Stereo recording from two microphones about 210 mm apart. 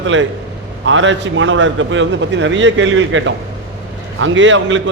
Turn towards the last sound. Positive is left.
turn(degrees=-60)  # may be behind; listen again after turning